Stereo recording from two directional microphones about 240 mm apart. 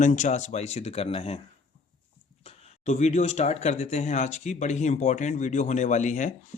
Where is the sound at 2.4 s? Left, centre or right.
Left.